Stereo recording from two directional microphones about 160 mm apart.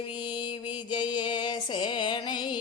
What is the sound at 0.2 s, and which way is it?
Mantra, 30° left (ahead or behind).